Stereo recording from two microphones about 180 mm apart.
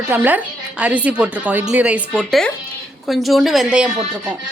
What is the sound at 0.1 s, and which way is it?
A woman's voice, 10° right (ahead or behind).